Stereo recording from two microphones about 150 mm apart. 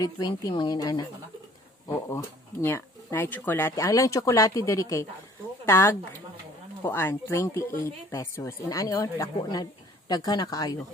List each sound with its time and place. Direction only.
0.0 s speech: 25° left (ahead or behind)